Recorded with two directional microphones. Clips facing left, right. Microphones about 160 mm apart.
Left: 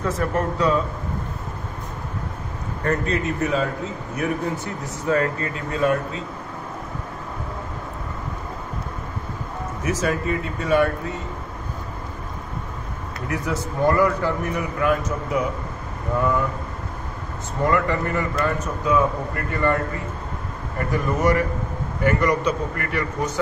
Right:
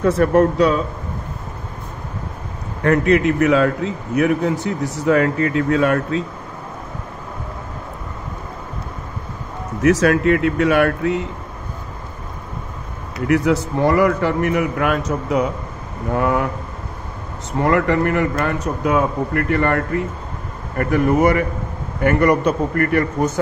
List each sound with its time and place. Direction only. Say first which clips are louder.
0.0 s a man's voice: right 9 dB; 65° right (ahead or behind)
2.8 s a man's voice: right 8 dB; 70° right (ahead or behind)
9.8 s speech: right 10 dB; 90° right
13.3 s a man's voice: right 10 dB; 80° right
17.6 s a man's voice: right 5 dB; 70° right (ahead or behind); by 23.4 s 50° right (ahead or behind)